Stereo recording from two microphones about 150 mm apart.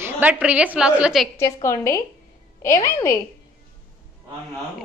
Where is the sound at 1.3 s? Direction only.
20° left (ahead or behind).